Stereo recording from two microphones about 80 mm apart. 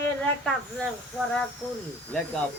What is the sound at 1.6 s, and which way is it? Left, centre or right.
Speech, left.